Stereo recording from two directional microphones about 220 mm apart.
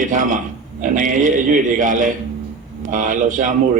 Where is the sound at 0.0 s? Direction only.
35° right (ahead or behind).